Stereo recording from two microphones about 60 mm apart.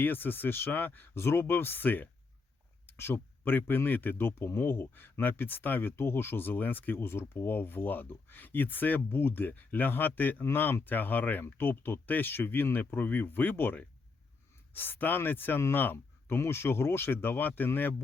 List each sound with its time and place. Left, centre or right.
0.0 s a man's voice: left